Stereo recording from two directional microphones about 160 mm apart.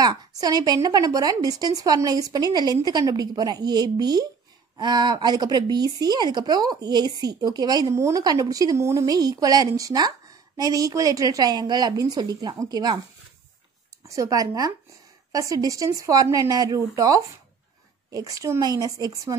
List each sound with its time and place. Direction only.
0.0 s speech: 25° right (ahead or behind)
14.0 s speech: 20° right (ahead or behind)